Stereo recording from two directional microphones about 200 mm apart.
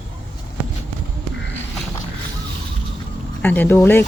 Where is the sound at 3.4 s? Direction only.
10° left (ahead or behind).